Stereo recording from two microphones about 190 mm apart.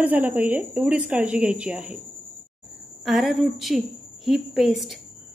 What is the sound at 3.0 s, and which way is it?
A woman's voice, centre (ahead or behind).